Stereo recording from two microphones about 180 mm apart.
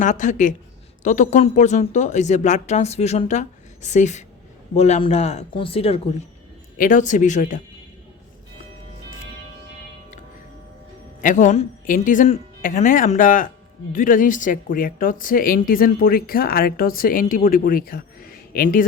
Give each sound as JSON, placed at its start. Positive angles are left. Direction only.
{"t": 0.0, "sound": "speech", "side_deg": 45}
{"t": 6.7, "sound": "speech", "side_deg": 45}
{"t": 11.2, "sound": "speech", "side_deg": 45}